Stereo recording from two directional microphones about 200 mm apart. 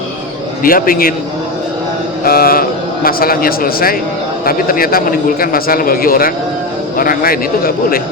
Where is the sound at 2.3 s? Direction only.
50° left (ahead or behind).